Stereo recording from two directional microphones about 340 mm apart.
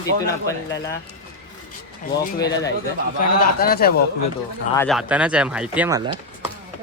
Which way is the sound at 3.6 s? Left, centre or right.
Left.